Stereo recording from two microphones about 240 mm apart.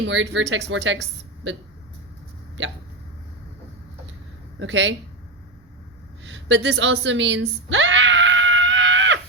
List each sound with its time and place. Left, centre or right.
0.0 s speech: right
2.6 s speech: right
4.6 s speech: right
6.2 s a sound: right